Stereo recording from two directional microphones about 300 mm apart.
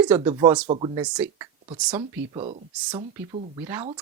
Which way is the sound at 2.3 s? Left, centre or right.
Centre.